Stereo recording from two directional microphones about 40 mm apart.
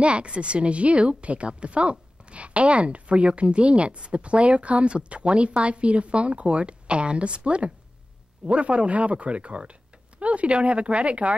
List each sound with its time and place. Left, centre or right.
0.0 s a woman's voice: right